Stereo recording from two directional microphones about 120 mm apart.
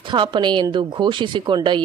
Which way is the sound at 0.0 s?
40° right (ahead or behind).